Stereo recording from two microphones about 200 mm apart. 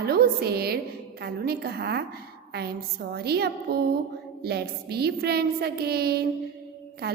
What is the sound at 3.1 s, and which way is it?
A woman's voice, 55° right (ahead or behind).